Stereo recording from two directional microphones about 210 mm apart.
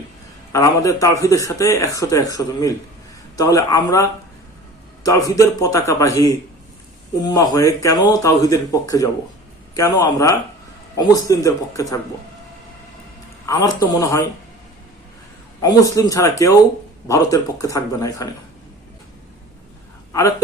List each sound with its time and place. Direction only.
0.5 s speech: 15° left (ahead or behind)
5.0 s speech: 15° left (ahead or behind)
13.4 s speech: 15° left (ahead or behind)
15.6 s speech: 15° left (ahead or behind)